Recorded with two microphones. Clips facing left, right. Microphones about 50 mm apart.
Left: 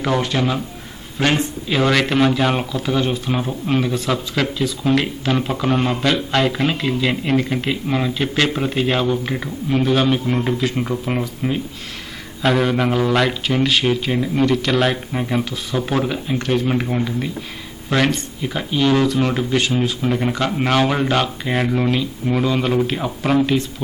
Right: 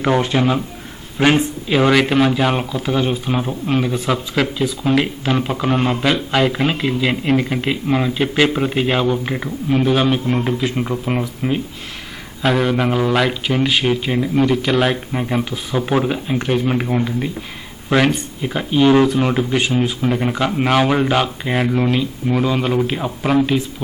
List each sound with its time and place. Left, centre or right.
0.0 s a man's voice: centre